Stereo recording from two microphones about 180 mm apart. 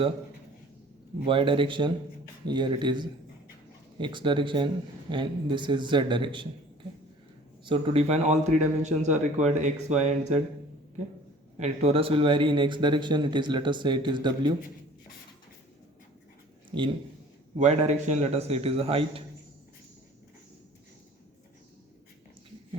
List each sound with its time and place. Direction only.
1.3 s speech: 30° right (ahead or behind)
7.6 s speech: 30° right (ahead or behind)
11.6 s speech: 35° right (ahead or behind)
17.6 s speech: 40° right (ahead or behind)